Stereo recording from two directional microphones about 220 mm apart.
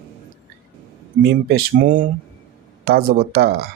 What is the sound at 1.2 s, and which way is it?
Speech, 45° right (ahead or behind).